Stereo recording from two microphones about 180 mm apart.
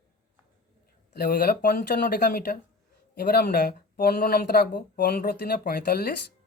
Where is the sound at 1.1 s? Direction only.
60° left (ahead or behind).